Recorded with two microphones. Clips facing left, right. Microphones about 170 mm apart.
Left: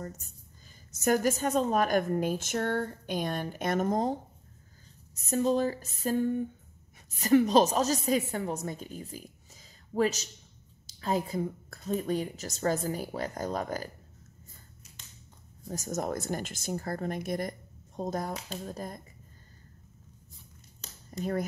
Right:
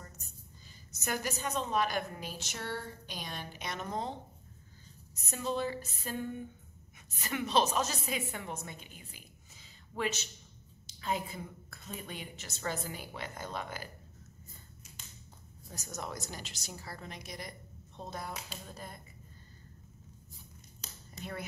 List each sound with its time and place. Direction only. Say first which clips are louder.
0.9 s a woman's voice: left 10 dB; 45° left (ahead or behind)
15.6 s a woman's voice: left 10 dB; 45° left (ahead or behind)
20.8 s a sound: left 11 dB; 40° left (ahead or behind)